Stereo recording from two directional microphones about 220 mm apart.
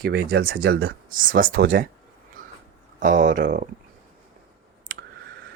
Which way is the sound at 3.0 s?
35° right (ahead or behind).